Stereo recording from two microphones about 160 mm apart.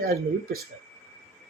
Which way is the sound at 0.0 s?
70° right (ahead or behind).